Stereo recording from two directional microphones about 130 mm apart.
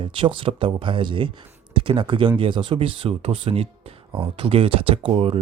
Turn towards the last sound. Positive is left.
turn(degrees=-45)  # may be behind; listen again after turning